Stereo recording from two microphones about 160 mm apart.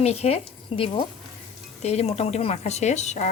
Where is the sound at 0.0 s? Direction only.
40° left (ahead or behind).